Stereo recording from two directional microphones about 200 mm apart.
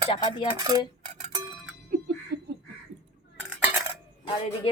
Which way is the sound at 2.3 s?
50° right (ahead or behind).